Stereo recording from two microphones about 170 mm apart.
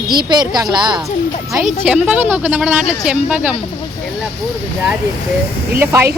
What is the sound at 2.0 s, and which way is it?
Speech, 10° right (ahead or behind).